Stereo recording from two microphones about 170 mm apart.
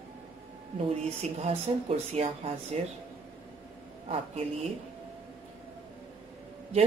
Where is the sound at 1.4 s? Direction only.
35° right (ahead or behind).